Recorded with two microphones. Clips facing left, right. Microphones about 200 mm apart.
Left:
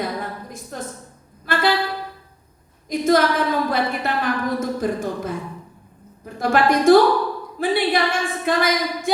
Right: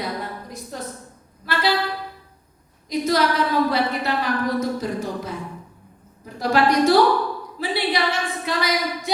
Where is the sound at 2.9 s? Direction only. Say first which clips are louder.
Left 3 dB; 50° left (ahead or behind).